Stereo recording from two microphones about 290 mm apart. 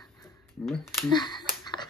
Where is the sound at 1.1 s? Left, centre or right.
Centre.